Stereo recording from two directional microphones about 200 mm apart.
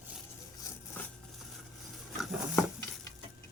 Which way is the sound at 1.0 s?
10° left (ahead or behind).